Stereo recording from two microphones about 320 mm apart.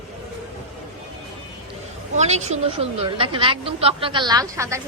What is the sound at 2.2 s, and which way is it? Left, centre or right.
A woman's voice, right.